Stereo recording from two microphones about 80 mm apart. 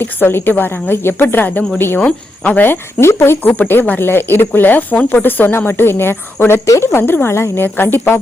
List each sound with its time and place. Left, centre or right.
0.0 s speech: left